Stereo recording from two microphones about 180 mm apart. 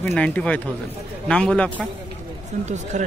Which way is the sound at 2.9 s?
40° right (ahead or behind).